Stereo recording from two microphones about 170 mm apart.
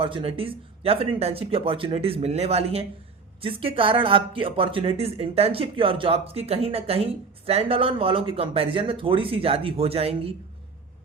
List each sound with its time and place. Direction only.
0.0 s speech: 35° right (ahead or behind)